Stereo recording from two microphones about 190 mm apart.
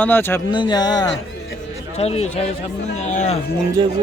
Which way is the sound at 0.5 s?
25° left (ahead or behind).